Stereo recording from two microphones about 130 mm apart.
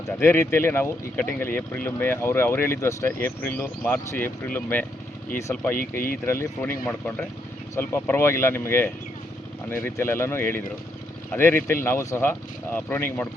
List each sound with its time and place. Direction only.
0.2 s speech: 20° left (ahead or behind)
6.2 s speech: 20° left (ahead or behind)